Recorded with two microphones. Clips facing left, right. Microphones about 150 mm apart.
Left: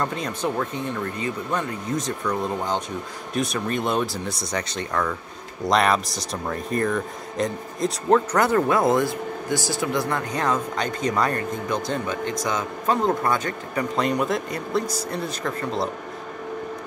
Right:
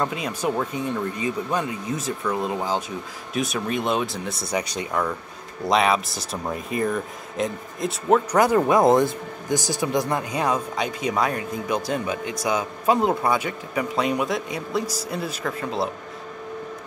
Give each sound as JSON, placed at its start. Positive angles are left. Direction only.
{"t": 0.0, "sound": "speech", "side_deg": -10}
{"t": 4.5, "sound": "speech", "side_deg": -10}